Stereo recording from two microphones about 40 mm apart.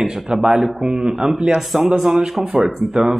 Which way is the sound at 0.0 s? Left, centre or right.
Centre.